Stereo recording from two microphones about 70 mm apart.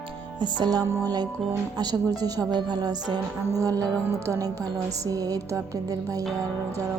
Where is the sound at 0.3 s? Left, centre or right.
Right.